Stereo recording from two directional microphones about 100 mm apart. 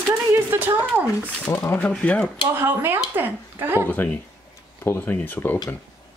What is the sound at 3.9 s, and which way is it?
Speech, 20° left (ahead or behind).